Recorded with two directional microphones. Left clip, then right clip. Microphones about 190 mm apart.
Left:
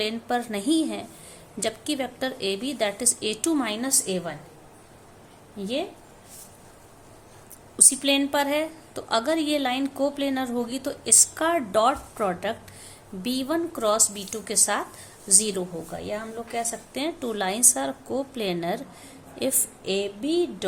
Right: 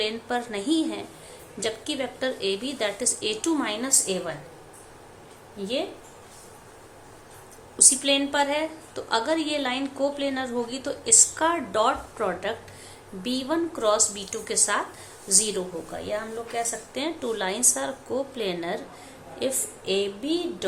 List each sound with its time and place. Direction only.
0.0 s a woman's voice: 45° left (ahead or behind)
5.6 s a woman's voice: 40° left (ahead or behind)
7.8 s a woman's voice: 45° left (ahead or behind)